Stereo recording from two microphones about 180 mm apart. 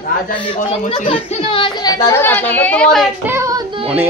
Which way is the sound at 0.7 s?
35° left (ahead or behind).